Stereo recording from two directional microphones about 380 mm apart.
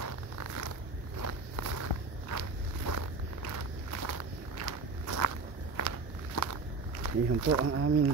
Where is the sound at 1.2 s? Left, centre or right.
Right.